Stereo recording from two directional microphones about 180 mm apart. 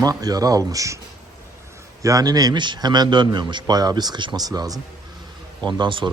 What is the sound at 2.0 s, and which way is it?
A man's voice, 20° right (ahead or behind).